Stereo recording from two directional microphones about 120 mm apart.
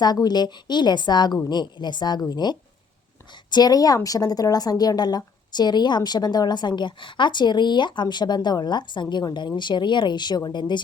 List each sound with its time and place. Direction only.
0.0 s speech: 35° left (ahead or behind)